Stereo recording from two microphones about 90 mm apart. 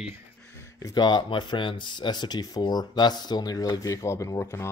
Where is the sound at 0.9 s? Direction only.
55° left (ahead or behind).